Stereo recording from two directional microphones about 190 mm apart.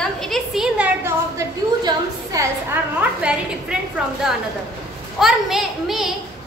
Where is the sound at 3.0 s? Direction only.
5° right (ahead or behind).